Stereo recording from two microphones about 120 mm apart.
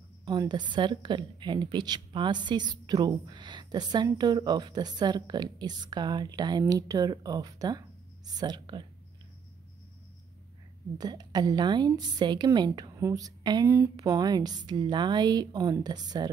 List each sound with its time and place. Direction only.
0.2 s a woman's voice: 35° right (ahead or behind)
11.0 s a woman's voice: 35° right (ahead or behind)
13.7 s a woman's voice: 20° right (ahead or behind)